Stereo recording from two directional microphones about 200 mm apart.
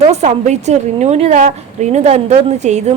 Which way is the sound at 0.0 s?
35° right (ahead or behind).